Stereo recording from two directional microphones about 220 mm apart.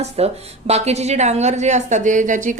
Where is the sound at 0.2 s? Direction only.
30° right (ahead or behind).